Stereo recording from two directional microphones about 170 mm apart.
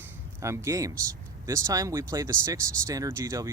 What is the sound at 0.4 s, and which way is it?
Speech, 15° right (ahead or behind).